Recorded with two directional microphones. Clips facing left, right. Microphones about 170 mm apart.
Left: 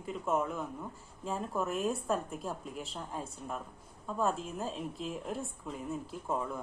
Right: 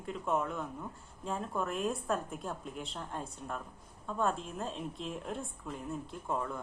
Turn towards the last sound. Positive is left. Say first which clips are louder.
# left 1 dB
turn(degrees=5)  # may be behind; listen again after turning